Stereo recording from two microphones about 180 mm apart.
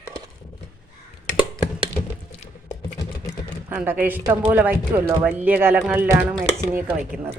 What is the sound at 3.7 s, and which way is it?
Speech, 10° right (ahead or behind).